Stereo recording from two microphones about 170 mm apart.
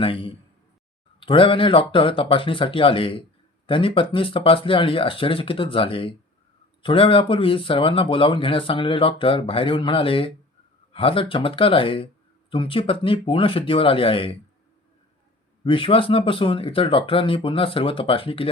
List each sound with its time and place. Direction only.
0.0 s speech: 30° left (ahead or behind)
15.6 s speech: 30° left (ahead or behind)